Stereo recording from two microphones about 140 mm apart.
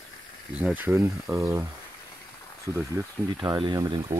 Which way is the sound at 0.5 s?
10° right (ahead or behind).